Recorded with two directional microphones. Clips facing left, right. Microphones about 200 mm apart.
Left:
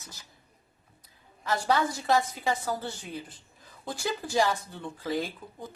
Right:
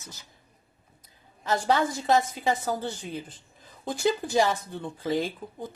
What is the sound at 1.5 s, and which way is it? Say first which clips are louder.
A woman's voice: right 2 dB; 20° right (ahead or behind).